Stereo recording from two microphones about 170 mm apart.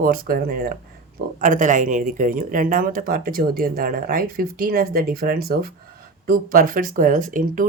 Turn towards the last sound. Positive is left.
turn(degrees=-50)  # may be behind; listen again after turning